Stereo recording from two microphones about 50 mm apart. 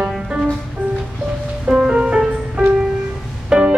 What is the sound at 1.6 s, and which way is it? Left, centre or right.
Music, right.